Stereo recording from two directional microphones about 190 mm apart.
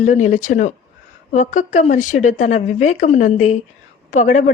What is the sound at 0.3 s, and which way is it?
A woman's voice, 40° left (ahead or behind).